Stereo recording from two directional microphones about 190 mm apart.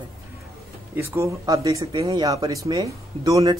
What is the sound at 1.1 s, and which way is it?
Speech, 15° right (ahead or behind).